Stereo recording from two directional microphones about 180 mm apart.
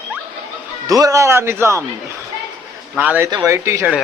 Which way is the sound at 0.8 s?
20° right (ahead or behind).